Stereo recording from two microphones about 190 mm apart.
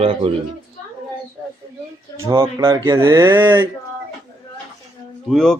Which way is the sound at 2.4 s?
20° right (ahead or behind).